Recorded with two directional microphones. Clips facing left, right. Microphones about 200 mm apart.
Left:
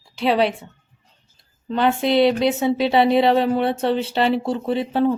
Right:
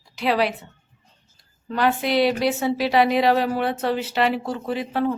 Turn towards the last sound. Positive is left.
turn(degrees=25)  # may be behind; listen again after turning